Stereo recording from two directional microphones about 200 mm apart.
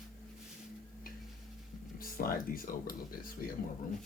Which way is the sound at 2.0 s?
45° left (ahead or behind).